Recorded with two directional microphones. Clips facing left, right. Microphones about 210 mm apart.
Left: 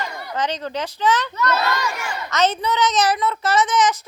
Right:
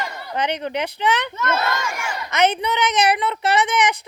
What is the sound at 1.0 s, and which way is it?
Speech, 60° right (ahead or behind).